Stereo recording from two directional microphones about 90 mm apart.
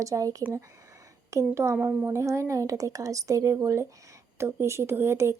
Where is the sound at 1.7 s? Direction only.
20° right (ahead or behind).